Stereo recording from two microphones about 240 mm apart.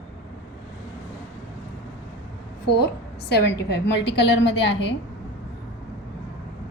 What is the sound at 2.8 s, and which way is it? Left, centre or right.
A woman's voice, left.